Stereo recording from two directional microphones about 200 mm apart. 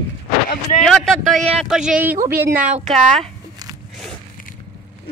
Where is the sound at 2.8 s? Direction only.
35° right (ahead or behind).